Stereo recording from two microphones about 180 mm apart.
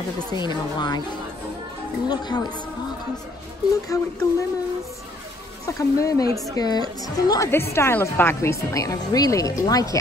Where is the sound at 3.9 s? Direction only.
15° left (ahead or behind).